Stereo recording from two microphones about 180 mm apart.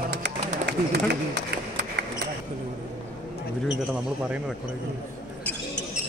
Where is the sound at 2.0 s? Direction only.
75° right (ahead or behind).